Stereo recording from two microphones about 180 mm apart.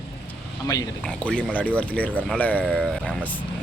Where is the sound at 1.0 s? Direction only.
5° left (ahead or behind).